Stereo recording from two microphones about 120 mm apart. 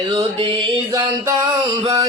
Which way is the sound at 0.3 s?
45° right (ahead or behind).